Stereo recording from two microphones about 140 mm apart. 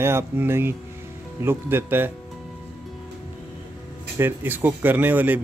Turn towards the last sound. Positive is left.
turn(degrees=-15)  # may be behind; listen again after turning